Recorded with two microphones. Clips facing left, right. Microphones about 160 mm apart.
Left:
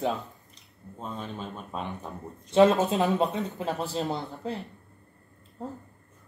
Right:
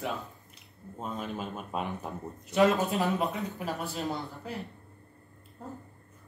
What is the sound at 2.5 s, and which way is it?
A man's voice, 25° left (ahead or behind).